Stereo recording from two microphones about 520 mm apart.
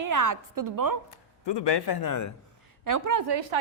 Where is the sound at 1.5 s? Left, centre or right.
Left.